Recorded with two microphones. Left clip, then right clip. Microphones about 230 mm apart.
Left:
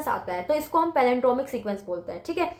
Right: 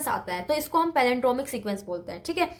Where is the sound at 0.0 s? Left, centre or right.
Right.